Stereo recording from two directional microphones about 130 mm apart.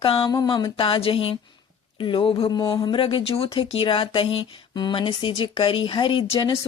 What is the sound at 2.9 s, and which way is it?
Speech, 40° left (ahead or behind).